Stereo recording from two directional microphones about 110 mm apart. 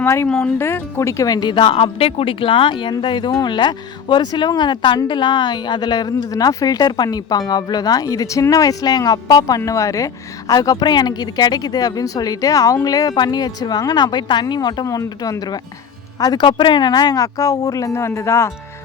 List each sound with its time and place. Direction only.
0.0 s a woman's voice: 25° left (ahead or behind)